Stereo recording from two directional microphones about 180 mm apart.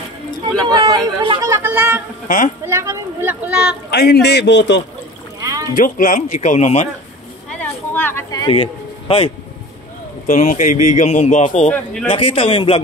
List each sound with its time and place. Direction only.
0.7 s a sound: 20° right (ahead or behind)
2.2 s speech: 50° left (ahead or behind)
2.6 s speech: 15° right (ahead or behind)
3.9 s a man's voice: 60° left (ahead or behind); by 4.8 s 75° left (ahead or behind)
5.4 s rowboat: 20° right (ahead or behind)
5.8 s speech: 50° left (ahead or behind)
7.4 s a sound: 10° left (ahead or behind); by 9.3 s 30° left (ahead or behind)
10.2 s speech: 45° left (ahead or behind)
11.7 s a man's voice: 5° left (ahead or behind)
12.1 s speech: 30° left (ahead or behind)